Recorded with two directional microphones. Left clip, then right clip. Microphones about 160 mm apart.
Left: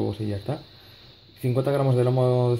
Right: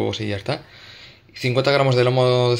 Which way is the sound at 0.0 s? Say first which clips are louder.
Right 5 dB; 5° right (ahead or behind).